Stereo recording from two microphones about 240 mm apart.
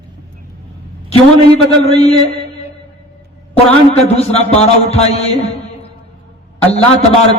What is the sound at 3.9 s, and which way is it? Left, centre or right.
A man's voice, left.